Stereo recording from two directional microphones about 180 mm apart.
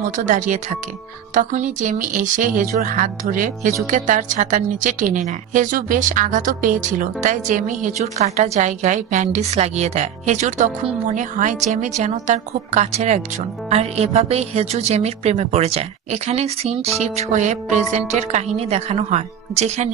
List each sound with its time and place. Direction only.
0.1 s a woman's voice: 45° right (ahead or behind)